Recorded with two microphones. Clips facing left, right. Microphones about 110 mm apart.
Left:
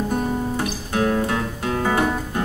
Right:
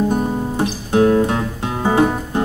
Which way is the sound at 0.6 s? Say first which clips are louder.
Right 7 dB; 25° right (ahead or behind).